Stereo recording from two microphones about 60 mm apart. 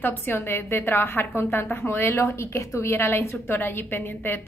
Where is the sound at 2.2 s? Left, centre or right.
Left.